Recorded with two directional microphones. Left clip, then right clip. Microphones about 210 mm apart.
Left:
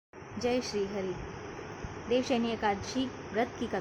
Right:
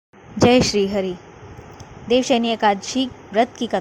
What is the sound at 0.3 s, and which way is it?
Speech, 45° right (ahead or behind).